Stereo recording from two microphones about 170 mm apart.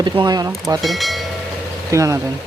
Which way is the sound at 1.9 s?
20° right (ahead or behind).